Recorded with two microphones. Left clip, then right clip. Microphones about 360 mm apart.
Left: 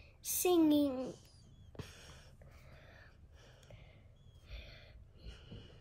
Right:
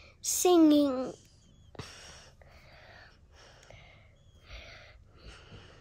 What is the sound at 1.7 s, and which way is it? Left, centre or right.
Gasp, right.